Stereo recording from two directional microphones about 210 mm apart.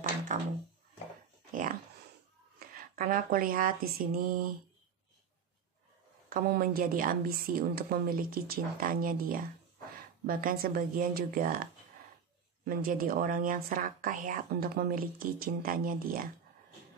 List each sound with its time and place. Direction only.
0.3 s a sound: 40° right (ahead or behind)
1.5 s dog: 40° right (ahead or behind)
2.6 s speech: 45° right (ahead or behind)
6.3 s speech: 45° right (ahead or behind)